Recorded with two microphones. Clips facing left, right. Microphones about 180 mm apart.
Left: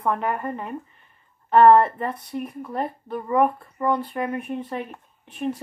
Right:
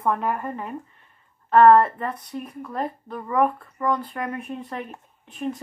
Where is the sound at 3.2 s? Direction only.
25° left (ahead or behind).